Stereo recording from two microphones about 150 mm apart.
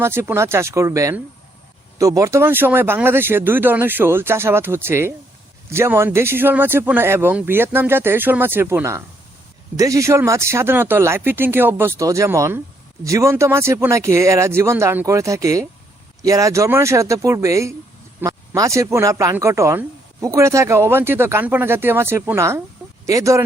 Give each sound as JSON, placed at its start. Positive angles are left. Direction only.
{"t": 0.0, "sound": "speech", "side_deg": -15}